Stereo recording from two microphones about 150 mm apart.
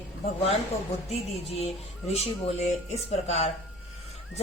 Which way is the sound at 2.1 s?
45° left (ahead or behind).